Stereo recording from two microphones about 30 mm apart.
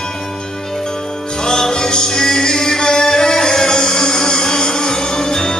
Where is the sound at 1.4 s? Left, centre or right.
Left.